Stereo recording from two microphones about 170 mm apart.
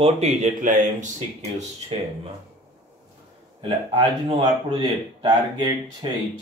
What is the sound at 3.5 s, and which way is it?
Speech, 25° right (ahead or behind).